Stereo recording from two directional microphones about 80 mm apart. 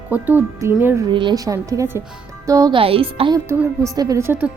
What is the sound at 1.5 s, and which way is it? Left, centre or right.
Speech, right.